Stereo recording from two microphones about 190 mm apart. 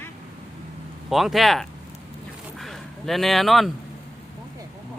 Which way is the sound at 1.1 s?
Centre (ahead or behind).